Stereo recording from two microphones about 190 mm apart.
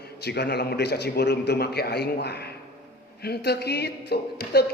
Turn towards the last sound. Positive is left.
turn(degrees=55)  # may be behind; listen again after turning